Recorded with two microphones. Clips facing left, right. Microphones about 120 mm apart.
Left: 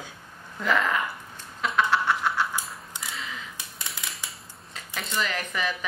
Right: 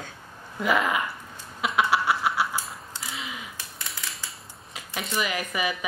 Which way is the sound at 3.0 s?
15° left (ahead or behind).